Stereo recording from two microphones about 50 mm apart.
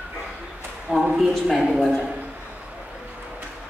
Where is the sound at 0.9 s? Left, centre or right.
Right.